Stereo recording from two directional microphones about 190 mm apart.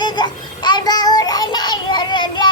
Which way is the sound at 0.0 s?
25° left (ahead or behind).